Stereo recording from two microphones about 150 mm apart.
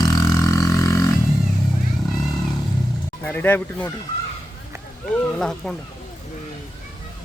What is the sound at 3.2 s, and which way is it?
Speech, 10° left (ahead or behind).